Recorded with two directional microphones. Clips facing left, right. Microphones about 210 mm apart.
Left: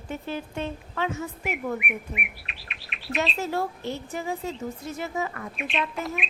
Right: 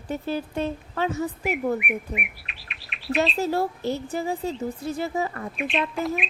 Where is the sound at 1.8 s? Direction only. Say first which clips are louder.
Right 4 dB; centre (ahead or behind).